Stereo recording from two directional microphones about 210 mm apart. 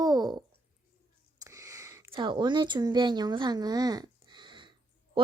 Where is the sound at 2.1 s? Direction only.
20° right (ahead or behind).